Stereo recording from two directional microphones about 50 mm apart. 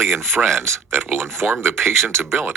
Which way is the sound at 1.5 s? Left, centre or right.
Right.